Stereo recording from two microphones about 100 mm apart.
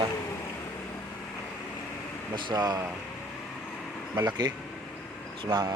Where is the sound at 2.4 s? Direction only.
45° right (ahead or behind).